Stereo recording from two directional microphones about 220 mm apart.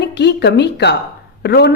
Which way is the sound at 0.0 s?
50° left (ahead or behind).